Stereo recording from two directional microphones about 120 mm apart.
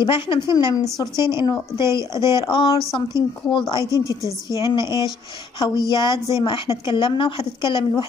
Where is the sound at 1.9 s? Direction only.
25° right (ahead or behind).